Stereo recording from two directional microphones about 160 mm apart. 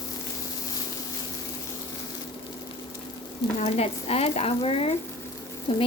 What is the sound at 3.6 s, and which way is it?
Stir, 40° left (ahead or behind).